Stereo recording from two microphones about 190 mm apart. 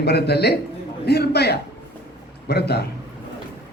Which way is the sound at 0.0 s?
60° left (ahead or behind).